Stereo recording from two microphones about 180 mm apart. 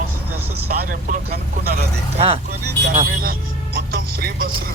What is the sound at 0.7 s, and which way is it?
Speech, 50° right (ahead or behind).